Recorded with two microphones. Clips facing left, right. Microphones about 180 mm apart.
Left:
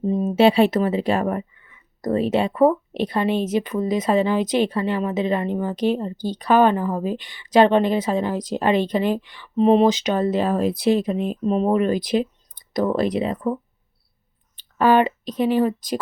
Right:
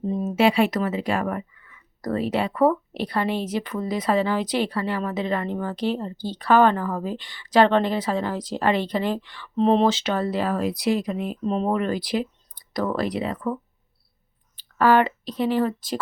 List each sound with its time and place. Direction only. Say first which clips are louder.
0.0 s a sound: left 4 dB; 20° left (ahead or behind)
0.3 s speech: left 4 dB; 30° left (ahead or behind)
11.4 s speech: left 4 dB; 15° left (ahead or behind)